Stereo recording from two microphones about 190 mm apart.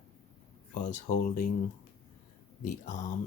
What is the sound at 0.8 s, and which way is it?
Speech, 40° left (ahead or behind).